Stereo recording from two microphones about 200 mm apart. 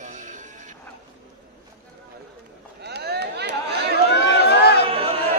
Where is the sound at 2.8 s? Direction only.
55° right (ahead or behind).